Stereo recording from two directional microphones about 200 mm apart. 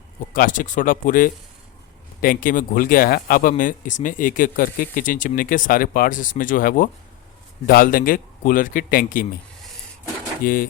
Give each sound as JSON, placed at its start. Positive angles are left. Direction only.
{"t": 0.3, "sound": "speech", "side_deg": 40}
{"t": 10.4, "sound": "speech", "side_deg": 45}